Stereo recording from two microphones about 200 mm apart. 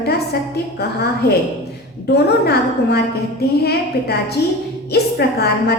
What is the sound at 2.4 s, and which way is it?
A woman's voice, 55° left (ahead or behind).